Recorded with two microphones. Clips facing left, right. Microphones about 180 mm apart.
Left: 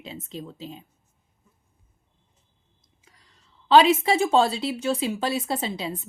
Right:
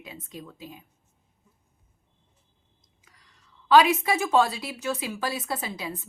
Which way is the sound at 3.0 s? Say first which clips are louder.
Left 1 dB; 25° left (ahead or behind).